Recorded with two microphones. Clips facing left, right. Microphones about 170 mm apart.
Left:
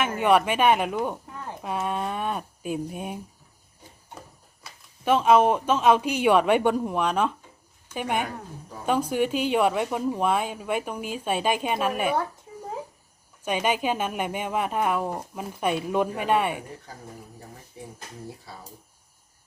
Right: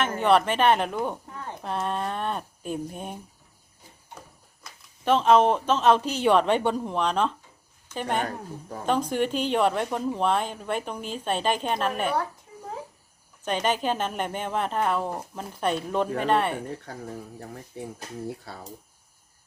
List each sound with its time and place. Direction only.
0.0 s speech: 10° left (ahead or behind)
4.6 s speech: 10° left (ahead or behind)
13.4 s speech: 10° left (ahead or behind)
16.9 s speech: 65° right (ahead or behind)